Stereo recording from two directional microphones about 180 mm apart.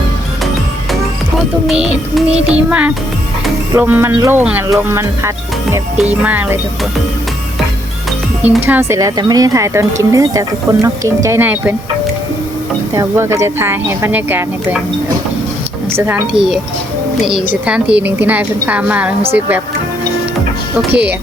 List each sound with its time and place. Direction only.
1.6 s music: 5° right (ahead or behind)
2.5 s speech: 5° right (ahead or behind)
8.4 s speech: 10° right (ahead or behind)
12.9 s speech: 15° right (ahead or behind)
15.9 s speech: 10° right (ahead or behind)
17.2 s speech: 5° right (ahead or behind)